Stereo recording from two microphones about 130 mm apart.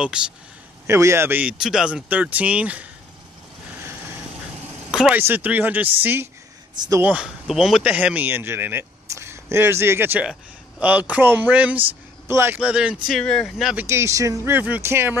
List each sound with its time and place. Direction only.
0.2 s speech: 5° right (ahead or behind)
0.8 s speech: 20° right (ahead or behind)
4.9 s vehicle: 5° right (ahead or behind)
5.2 s speech: 15° right (ahead or behind)
7.0 s speech: 10° right (ahead or behind)
12.5 s speech: 10° right (ahead or behind)
13.2 s speech: 5° left (ahead or behind)
13.7 s speech: 20° right (ahead or behind)